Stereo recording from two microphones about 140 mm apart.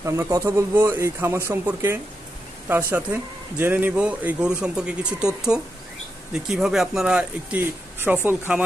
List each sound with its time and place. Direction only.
0.0 s a man's voice: 20° right (ahead or behind)